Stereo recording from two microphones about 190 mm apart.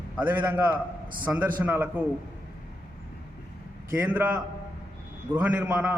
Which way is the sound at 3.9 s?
10° right (ahead or behind).